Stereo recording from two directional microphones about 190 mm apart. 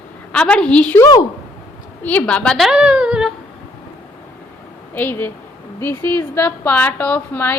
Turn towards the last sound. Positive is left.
turn(degrees=10)  # may be behind; listen again after turning